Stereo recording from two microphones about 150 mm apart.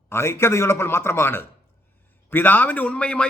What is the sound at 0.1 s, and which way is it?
A man's voice, 15° left (ahead or behind).